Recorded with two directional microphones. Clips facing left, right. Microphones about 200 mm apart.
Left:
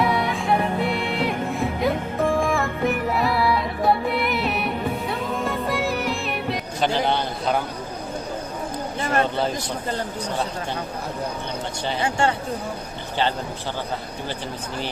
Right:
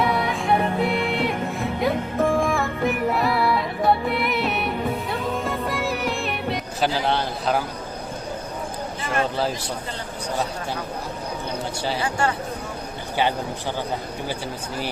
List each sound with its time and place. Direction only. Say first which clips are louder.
0.0 s music: even; centre (ahead or behind)
9.2 s a man's voice: left 1 dB; centre (ahead or behind)
12.0 s speech: left 3 dB; 25° left (ahead or behind)